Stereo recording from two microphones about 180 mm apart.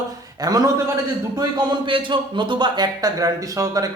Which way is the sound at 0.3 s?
20° right (ahead or behind).